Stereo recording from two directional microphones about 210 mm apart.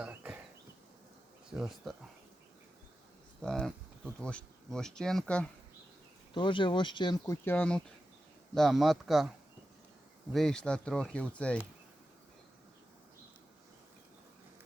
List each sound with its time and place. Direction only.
0.0 s a sound: 5° right (ahead or behind)
1.5 s speech: centre (ahead or behind)
3.4 s speech: 5° left (ahead or behind)
6.3 s speech: 25° left (ahead or behind)
7.4 s speech: 5° left (ahead or behind)
10.3 s speech: centre (ahead or behind)